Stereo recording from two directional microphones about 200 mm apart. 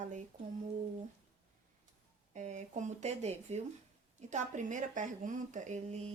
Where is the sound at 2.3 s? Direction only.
35° right (ahead or behind).